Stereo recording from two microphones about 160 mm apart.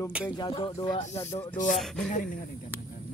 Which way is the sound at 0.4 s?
35° left (ahead or behind).